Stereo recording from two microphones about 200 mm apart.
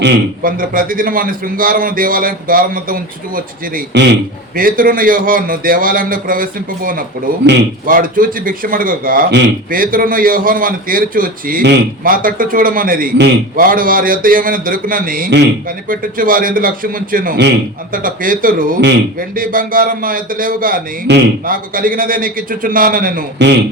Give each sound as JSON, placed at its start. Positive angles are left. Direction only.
{"t": 0.0, "sound": "a man's voice", "side_deg": -45}